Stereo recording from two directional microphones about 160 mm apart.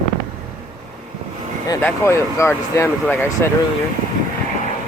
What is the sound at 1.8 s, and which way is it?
Speech, 15° left (ahead or behind).